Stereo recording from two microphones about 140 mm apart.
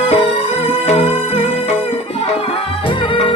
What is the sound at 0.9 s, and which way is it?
Music, 50° left (ahead or behind).